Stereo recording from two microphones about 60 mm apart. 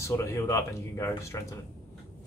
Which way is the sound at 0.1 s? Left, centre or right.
Left.